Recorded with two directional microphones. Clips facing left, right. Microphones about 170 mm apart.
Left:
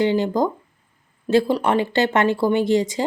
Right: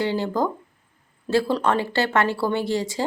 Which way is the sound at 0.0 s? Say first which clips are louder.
Left 4 dB; 20° left (ahead or behind).